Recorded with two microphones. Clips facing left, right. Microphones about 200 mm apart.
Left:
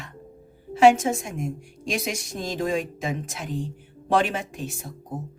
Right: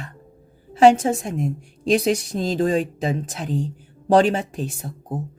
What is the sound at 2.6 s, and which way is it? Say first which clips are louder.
Speech: right 5 dB; 35° right (ahead or behind).